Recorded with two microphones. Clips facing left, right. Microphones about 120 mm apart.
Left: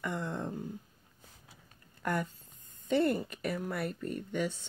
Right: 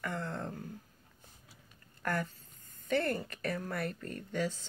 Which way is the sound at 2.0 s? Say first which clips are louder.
Left 2 dB; 15° left (ahead or behind).